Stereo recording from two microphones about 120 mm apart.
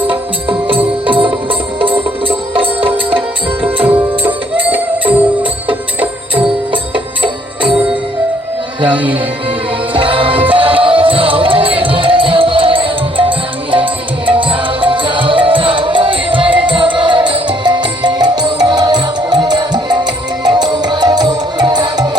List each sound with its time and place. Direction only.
0.1 s music: 45° right (ahead or behind)
4.5 s music: 45° right (ahead or behind)
6.9 s music: 45° right (ahead or behind)
8.8 s music: 45° right (ahead or behind)